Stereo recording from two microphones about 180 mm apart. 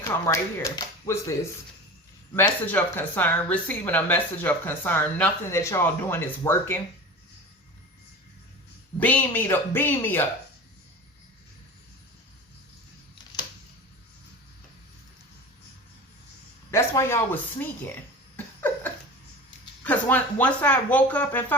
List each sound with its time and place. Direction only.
0.0 s speech: 15° left (ahead or behind)
9.0 s speech: 10° left (ahead or behind)
16.7 s speech: 15° left (ahead or behind)
18.3 s a sound: 10° left (ahead or behind)
19.8 s speech: 10° left (ahead or behind)